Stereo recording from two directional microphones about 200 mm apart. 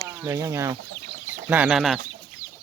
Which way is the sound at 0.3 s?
15° right (ahead or behind).